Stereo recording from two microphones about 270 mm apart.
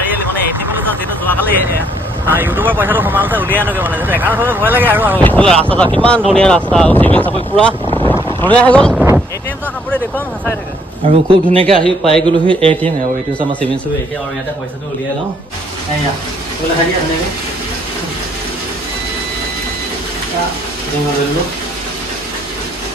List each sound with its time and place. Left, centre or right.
2.2 s speech: centre
5.1 s speech: centre
11.2 s a man's voice: centre
11.8 s speech: centre
12.3 s a man's voice: centre
13.4 s speech: centre